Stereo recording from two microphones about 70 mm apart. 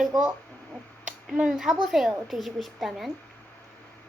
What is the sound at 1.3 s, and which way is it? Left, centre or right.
Speech, centre.